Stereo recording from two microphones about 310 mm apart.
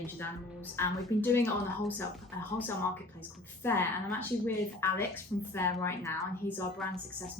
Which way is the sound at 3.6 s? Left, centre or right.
Centre.